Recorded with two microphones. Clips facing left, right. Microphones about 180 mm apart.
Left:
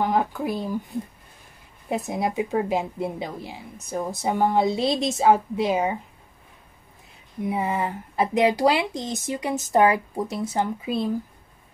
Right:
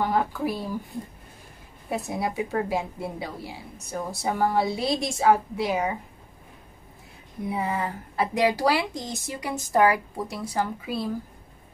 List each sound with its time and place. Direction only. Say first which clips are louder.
0.0 s speech: left 2 dB; 20° left (ahead or behind)
2.0 s speech: left 3 dB; 20° left (ahead or behind)
7.4 s speech: left 3 dB; 20° left (ahead or behind)